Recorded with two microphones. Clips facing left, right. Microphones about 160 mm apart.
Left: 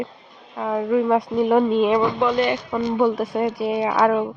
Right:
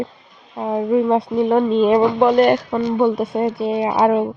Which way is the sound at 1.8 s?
35° right (ahead or behind).